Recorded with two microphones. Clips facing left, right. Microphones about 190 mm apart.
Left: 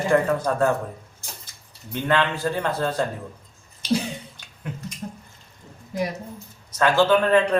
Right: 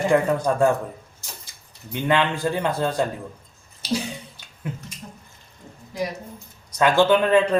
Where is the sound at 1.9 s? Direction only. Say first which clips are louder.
Right 1 dB; 15° right (ahead or behind).